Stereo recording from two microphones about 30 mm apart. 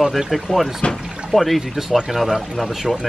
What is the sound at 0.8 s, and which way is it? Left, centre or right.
Speech, left.